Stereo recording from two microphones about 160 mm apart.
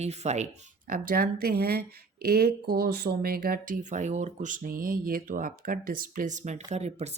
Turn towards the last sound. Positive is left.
turn(degrees=-45)  # may be behind; listen again after turning